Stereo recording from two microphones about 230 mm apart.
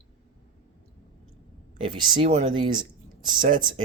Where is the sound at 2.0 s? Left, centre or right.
Right.